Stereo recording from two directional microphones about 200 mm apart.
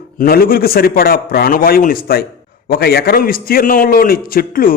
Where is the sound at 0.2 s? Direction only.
45° left (ahead or behind).